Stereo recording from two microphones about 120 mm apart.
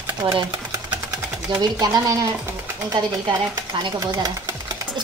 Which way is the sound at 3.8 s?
35° right (ahead or behind).